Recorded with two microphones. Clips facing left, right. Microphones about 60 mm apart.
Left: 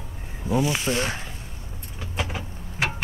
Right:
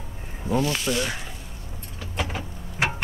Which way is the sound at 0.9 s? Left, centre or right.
Left.